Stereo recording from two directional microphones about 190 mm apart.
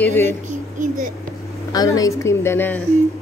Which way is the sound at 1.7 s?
20° left (ahead or behind).